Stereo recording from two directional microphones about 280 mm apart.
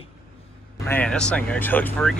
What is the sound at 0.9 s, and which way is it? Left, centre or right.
Speech, centre.